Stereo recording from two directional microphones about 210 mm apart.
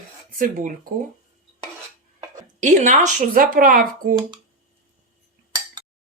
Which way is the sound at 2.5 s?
35° right (ahead or behind).